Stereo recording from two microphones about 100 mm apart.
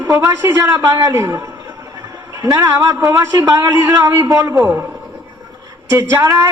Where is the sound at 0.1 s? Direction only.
30° right (ahead or behind).